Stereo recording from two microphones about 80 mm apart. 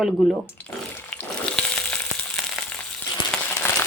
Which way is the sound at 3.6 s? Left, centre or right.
Left.